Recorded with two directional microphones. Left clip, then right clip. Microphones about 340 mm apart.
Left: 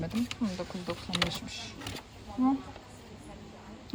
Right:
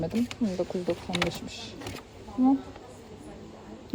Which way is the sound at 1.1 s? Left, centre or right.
Centre.